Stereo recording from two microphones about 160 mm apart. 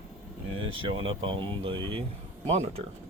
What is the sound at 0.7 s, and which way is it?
Speech, 35° right (ahead or behind).